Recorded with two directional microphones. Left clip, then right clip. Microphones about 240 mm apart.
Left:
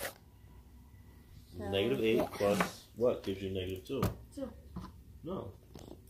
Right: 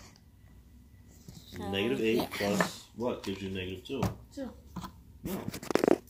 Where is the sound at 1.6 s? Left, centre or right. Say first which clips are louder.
Right 1 dB; centre.